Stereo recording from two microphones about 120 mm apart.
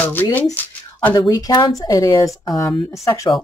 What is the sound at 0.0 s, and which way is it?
Speech, 15° left (ahead or behind).